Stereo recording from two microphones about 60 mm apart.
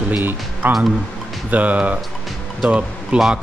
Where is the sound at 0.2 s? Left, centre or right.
Right.